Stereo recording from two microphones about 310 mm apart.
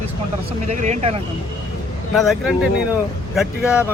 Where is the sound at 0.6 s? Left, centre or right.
Right.